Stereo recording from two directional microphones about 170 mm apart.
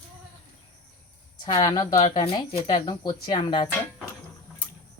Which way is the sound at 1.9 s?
35° left (ahead or behind).